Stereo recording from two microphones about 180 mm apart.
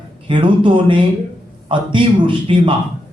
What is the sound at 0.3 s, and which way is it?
A man's voice, 25° right (ahead or behind).